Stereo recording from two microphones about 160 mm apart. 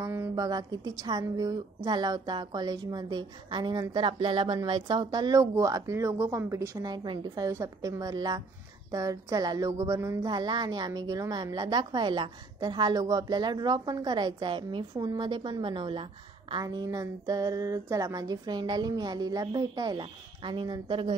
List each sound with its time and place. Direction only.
0.0 s a woman's voice: 15° right (ahead or behind); by 16.6 s 35° right (ahead or behind)
16.6 s speech: 20° right (ahead or behind)